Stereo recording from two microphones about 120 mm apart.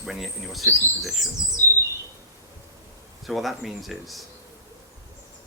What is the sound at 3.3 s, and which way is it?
Speech, centre (ahead or behind).